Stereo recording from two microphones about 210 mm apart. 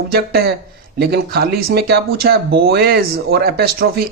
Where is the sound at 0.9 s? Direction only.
50° right (ahead or behind).